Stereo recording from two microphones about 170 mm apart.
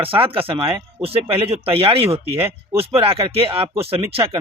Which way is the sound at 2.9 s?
35° right (ahead or behind).